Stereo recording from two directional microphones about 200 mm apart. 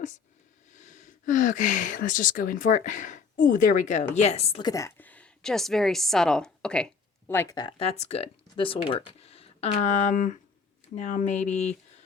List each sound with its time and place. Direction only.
0.8 s speech: 40° left (ahead or behind)
4.7 s a woman's voice: 10° left (ahead or behind); by 11.7 s 35° left (ahead or behind)